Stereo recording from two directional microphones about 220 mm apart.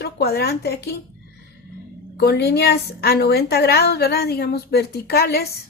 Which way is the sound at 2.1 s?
50° left (ahead or behind).